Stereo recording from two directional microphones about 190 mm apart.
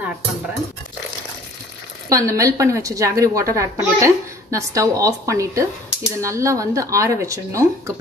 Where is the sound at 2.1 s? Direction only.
15° right (ahead or behind).